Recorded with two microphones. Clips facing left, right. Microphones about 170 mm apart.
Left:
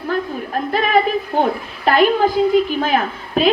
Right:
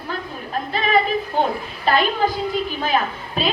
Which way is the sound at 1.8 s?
55° left (ahead or behind).